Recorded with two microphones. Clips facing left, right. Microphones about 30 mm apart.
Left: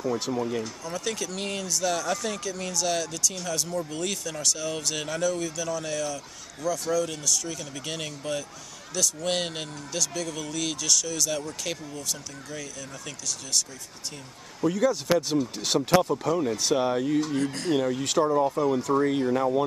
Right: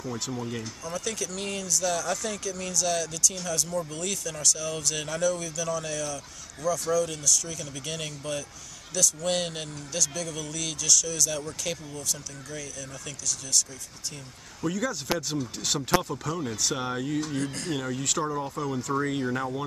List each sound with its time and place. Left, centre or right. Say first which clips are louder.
0.0 s speech: left 6 dB; centre
14.6 s speech: left 6 dB; centre
16.7 s speech: left 8 dB; centre
18.9 s speech: left 4 dB; centre